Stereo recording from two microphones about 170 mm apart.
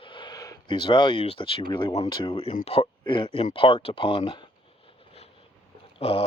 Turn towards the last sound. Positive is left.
turn(degrees=35)  # may be behind; listen again after turning